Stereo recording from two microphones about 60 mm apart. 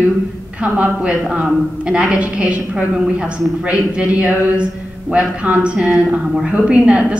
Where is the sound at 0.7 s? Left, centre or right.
Right.